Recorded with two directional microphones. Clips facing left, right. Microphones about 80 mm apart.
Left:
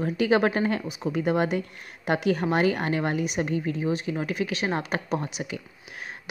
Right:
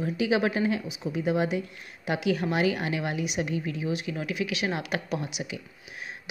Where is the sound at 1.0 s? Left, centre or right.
Left.